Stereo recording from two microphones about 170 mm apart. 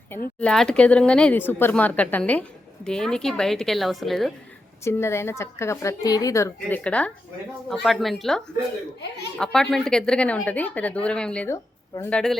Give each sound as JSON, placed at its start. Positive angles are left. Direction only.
{"t": 0.3, "sound": "a woman's voice", "side_deg": 5}
{"t": 4.8, "sound": "a woman's voice", "side_deg": 15}
{"t": 9.4, "sound": "speech", "side_deg": 5}
{"t": 12.1, "sound": "a woman's voice", "side_deg": 0}